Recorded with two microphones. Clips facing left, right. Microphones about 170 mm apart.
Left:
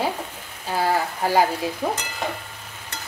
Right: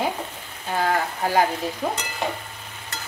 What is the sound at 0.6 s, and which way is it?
Speech, 5° left (ahead or behind).